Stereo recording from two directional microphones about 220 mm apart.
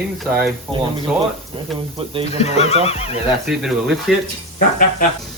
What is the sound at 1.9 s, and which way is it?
Speech, 25° right (ahead or behind).